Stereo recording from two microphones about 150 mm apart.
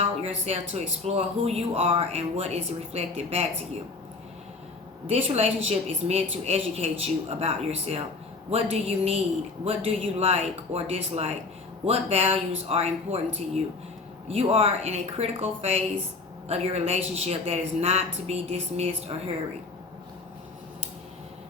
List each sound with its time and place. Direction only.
0.3 s speech: 45° right (ahead or behind)
5.0 s speech: 45° right (ahead or behind)